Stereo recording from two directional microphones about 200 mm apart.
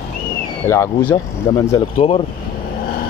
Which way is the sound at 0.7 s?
10° left (ahead or behind).